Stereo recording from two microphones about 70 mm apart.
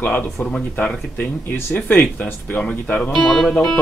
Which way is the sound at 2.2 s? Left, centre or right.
Left.